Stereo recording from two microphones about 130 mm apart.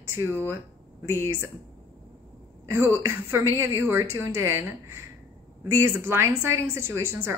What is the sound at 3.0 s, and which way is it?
A woman's voice, 20° right (ahead or behind).